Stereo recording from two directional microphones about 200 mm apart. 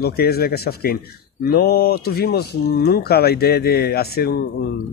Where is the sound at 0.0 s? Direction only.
50° left (ahead or behind).